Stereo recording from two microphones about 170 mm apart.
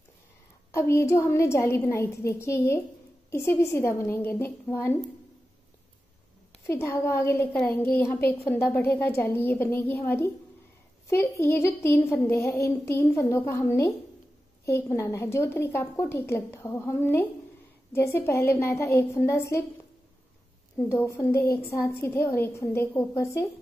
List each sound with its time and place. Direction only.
0.7 s speech: 15° left (ahead or behind)
6.7 s speech: 15° left (ahead or behind)
20.7 s speech: 15° left (ahead or behind)